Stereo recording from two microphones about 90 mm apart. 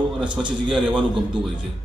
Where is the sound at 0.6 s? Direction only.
10° right (ahead or behind).